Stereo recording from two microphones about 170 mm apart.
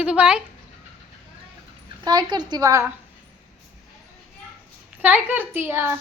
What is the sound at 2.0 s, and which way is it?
Speech, 25° right (ahead or behind).